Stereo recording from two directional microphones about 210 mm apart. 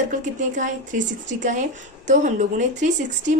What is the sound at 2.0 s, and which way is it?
Speech, 35° right (ahead or behind).